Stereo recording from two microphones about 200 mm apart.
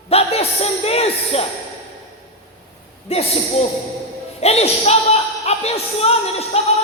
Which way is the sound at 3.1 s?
30° left (ahead or behind).